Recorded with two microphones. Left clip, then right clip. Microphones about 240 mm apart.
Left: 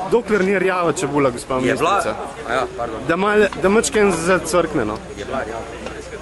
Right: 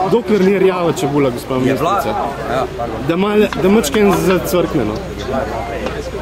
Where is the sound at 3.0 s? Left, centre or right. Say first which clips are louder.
Right 1 dB; centre.